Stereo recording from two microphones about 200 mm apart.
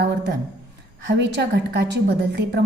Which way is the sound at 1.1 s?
60° right (ahead or behind).